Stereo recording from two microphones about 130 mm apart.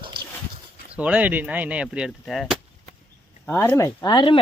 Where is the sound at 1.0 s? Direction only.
10° right (ahead or behind).